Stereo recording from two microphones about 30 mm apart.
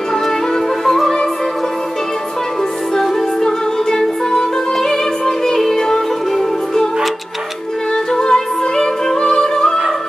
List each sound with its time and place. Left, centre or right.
0.8 s music: centre
3.0 s music: centre
8.1 s music: left